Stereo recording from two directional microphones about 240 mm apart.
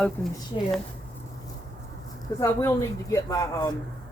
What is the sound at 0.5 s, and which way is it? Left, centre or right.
Speech, centre.